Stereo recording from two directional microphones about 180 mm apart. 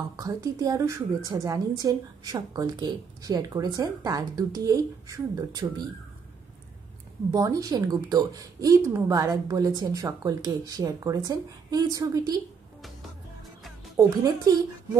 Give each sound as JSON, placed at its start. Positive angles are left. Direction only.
{"t": 0.1, "sound": "a woman's voice", "side_deg": -20}
{"t": 7.2, "sound": "a woman's voice", "side_deg": -20}
{"t": 13.9, "sound": "a woman's voice", "side_deg": -20}